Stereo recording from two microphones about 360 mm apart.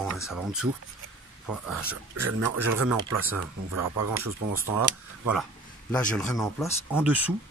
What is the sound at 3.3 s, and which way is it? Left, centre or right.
Speech, right.